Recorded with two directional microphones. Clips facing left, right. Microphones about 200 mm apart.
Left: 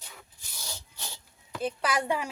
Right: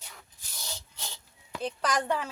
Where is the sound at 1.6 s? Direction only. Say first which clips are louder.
Left 1 dB; 5° left (ahead or behind).